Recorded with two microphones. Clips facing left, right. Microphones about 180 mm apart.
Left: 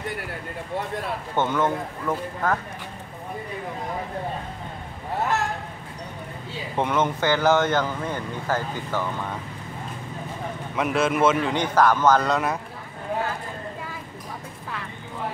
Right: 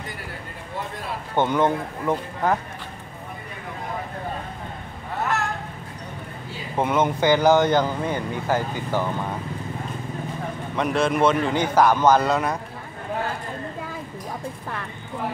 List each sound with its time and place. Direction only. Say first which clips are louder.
1.3 s speech: right 3 dB; 15° right (ahead or behind)
6.8 s speech: right 2 dB; 10° right (ahead or behind)
10.8 s a man's voice: right 1 dB; 5° left (ahead or behind)
11.4 s speech: right 1 dB; 5° right (ahead or behind)